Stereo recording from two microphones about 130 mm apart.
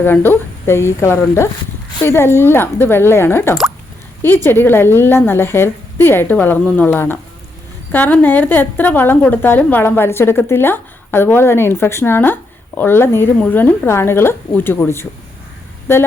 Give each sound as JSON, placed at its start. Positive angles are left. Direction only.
{"t": 0.0, "sound": "a woman's voice", "side_deg": 15}